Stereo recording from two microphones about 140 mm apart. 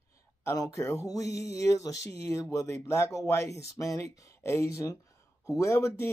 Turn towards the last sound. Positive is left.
turn(degrees=20)  # may be behind; listen again after turning